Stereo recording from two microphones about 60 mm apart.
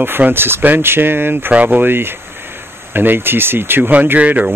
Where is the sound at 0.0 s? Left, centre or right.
Right.